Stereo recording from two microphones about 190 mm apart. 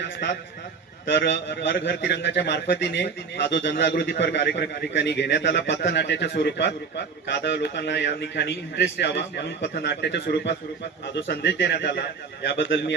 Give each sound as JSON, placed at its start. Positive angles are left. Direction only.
{"t": 0.0, "sound": "a man's voice", "side_deg": 65}